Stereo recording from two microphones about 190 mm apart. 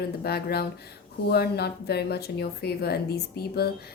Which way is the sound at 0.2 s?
55° left (ahead or behind).